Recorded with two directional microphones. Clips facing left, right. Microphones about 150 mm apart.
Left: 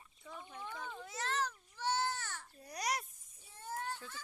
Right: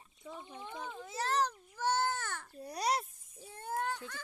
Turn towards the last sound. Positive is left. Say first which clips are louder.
# right 6 dB
turn(degrees=-60)  # may be behind; listen again after turning